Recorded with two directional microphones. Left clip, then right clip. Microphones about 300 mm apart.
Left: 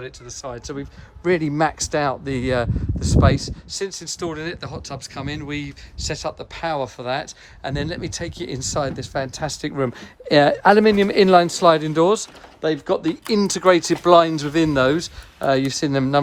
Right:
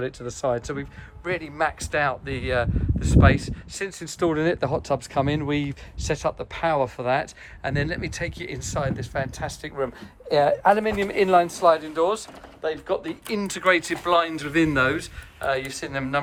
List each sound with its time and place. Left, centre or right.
0.0 s speech: centre
1.2 s speech: left